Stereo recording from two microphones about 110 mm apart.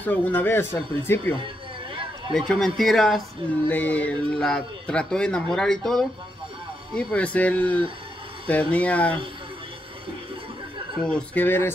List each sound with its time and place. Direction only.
0.0 s speech: 15° left (ahead or behind)
2.3 s a man's voice: 5° left (ahead or behind)
3.6 s speech: 15° left (ahead or behind)
11.0 s speech: 10° left (ahead or behind)